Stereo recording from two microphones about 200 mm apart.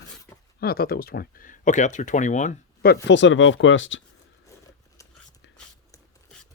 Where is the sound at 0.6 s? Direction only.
50° left (ahead or behind).